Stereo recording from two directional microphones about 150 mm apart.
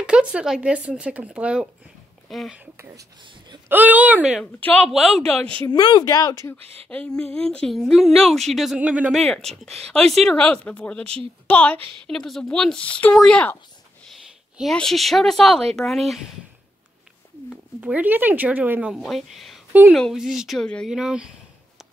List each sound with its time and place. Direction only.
0.0 s speech: 5° right (ahead or behind)
3.6 s speech: 10° right (ahead or behind)
4.6 s a woman's voice: 10° left (ahead or behind)
4.8 s a woman's voice: centre (ahead or behind)
5.7 s speech: 30° left (ahead or behind)
6.9 s a woman's voice: 10° left (ahead or behind)
14.6 s a woman's voice: 5° left (ahead or behind)
17.7 s a woman's voice: 10° right (ahead or behind)